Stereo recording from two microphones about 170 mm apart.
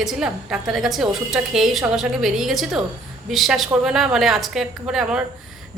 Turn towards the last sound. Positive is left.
turn(degrees=-5)  # may be behind; listen again after turning